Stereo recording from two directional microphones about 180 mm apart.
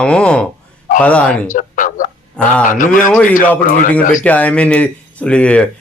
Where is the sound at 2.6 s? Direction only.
45° left (ahead or behind).